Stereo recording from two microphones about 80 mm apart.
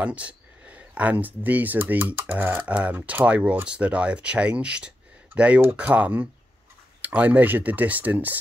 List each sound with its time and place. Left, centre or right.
0.0 s speech: centre